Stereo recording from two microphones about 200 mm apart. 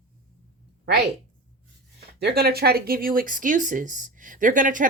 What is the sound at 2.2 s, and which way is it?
A woman's voice, 50° right (ahead or behind).